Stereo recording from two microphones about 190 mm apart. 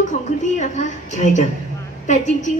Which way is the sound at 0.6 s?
40° left (ahead or behind).